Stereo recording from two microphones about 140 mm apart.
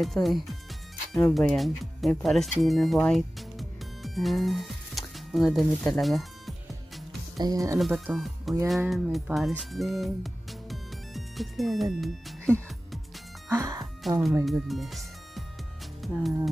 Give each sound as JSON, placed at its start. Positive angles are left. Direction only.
{"t": 0.0, "sound": "speech", "side_deg": 0}
{"t": 3.0, "sound": "music", "side_deg": 5}
{"t": 7.3, "sound": "speech", "side_deg": -25}
{"t": 7.8, "sound": "speech", "side_deg": -5}
{"t": 9.6, "sound": "music", "side_deg": 0}
{"t": 13.5, "sound": "music", "side_deg": -25}
{"t": 14.0, "sound": "speech", "side_deg": 0}